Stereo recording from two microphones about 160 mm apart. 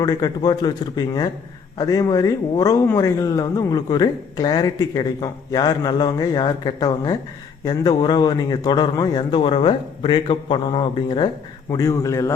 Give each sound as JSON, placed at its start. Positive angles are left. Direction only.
{"t": 0.0, "sound": "speech", "side_deg": 20}